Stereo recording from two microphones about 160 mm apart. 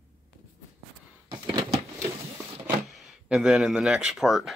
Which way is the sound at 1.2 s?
25° right (ahead or behind).